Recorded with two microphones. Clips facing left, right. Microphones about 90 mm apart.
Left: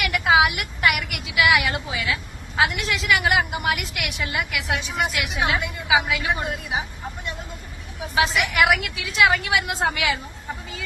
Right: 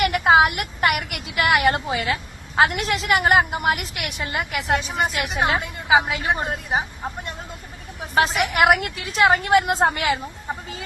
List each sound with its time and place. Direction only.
0.0 s a woman's voice: 45° right (ahead or behind)
8.1 s a woman's voice: 45° right (ahead or behind)